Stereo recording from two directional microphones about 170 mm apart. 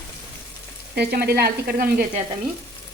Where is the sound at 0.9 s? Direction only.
65° right (ahead or behind).